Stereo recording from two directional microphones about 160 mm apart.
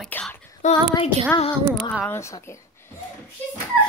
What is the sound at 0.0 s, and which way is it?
Female singing, 5° left (ahead or behind).